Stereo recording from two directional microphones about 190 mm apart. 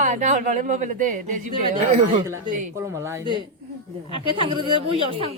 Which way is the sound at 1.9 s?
30° right (ahead or behind).